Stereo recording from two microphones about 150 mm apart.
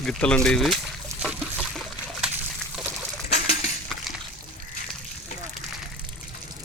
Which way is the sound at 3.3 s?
45° left (ahead or behind).